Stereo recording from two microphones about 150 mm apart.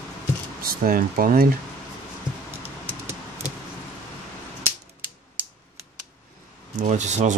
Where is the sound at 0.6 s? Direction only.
75° right (ahead or behind).